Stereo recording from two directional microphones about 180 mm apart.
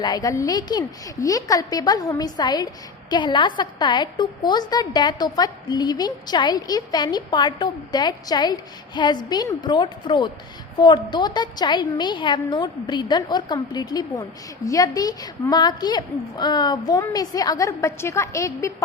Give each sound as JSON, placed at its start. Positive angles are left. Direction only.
{"t": 0.0, "sound": "a woman's voice", "side_deg": 20}